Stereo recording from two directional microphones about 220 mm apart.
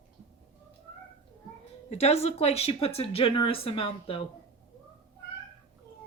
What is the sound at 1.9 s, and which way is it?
Speech, 30° left (ahead or behind).